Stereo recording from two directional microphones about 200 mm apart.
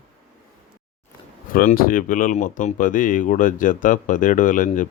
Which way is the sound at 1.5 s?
40° left (ahead or behind).